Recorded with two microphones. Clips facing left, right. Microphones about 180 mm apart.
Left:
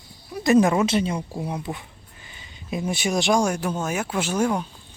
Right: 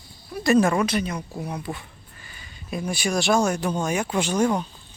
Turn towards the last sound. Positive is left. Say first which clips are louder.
# right 1 dB
turn(degrees=5)  # may be behind; listen again after turning